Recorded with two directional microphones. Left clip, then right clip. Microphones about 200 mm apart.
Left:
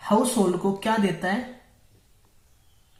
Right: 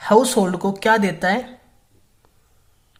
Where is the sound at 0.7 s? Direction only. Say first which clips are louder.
Right 8 dB; 50° right (ahead or behind).